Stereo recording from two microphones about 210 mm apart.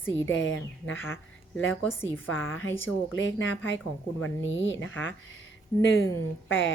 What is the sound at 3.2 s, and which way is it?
A woman's voice, 65° left (ahead or behind).